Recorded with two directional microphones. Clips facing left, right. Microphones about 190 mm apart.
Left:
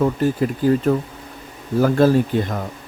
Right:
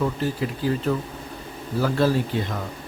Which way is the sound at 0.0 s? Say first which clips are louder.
Left 6 dB; 50° left (ahead or behind).